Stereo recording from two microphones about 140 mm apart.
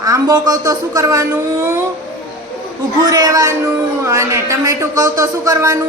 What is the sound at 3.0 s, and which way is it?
A woman's voice, 25° right (ahead or behind).